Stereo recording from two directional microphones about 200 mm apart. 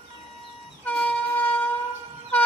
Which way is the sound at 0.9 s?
5° left (ahead or behind).